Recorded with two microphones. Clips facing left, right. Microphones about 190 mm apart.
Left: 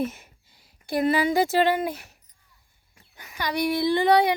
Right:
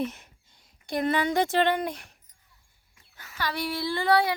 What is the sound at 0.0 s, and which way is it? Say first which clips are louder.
Speech: left 3 dB; 5° left (ahead or behind).